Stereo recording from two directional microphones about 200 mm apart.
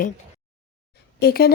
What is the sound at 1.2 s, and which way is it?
Speech, 50° left (ahead or behind).